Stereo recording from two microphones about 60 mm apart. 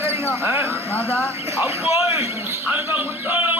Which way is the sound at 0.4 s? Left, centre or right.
Right.